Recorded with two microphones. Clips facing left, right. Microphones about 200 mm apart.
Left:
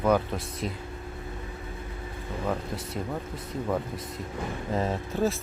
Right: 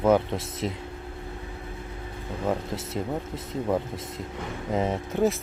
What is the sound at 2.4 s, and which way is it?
Speech, 25° right (ahead or behind).